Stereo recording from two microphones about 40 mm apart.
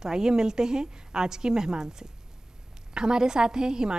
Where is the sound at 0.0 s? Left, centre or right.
Centre.